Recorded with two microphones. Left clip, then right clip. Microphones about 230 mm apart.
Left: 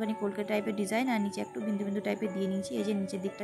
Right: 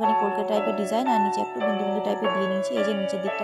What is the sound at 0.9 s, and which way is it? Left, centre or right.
Speech, centre.